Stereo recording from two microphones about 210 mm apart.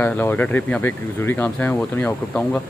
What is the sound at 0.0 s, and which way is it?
Speech, 10° left (ahead or behind).